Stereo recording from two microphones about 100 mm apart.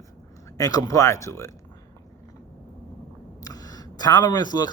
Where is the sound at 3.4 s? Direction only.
40° left (ahead or behind).